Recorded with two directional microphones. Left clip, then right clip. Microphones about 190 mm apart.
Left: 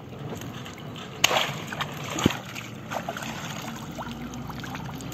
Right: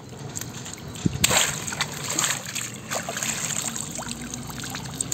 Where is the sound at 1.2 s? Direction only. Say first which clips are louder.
Right 1 dB; 15° right (ahead or behind).